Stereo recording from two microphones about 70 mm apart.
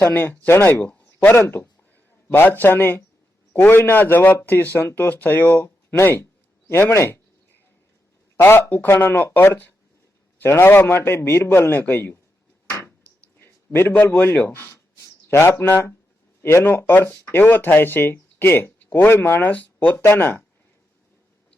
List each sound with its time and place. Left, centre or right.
0.0 s a man's voice: left
0.9 s a sound: left
1.4 s a man's voice: left
6.7 s a man's voice: left
8.4 s a man's voice: left
13.4 s a man's voice: left
20.0 s a man's voice: left